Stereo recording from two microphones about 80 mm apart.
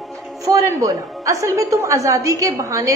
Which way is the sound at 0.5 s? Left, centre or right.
Right.